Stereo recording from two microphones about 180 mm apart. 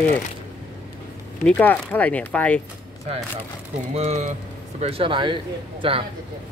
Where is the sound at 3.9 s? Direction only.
40° right (ahead or behind).